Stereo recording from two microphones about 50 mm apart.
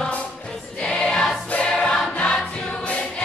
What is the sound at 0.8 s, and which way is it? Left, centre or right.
Choir, centre.